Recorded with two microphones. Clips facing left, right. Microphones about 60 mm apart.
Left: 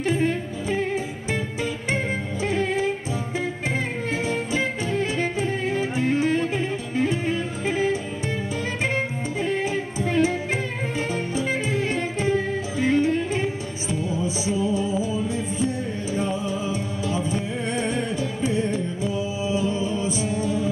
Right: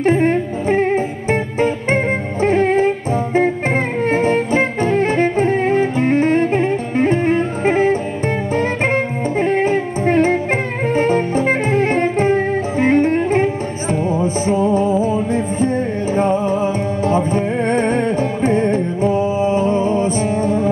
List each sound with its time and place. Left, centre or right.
0.0 s music: right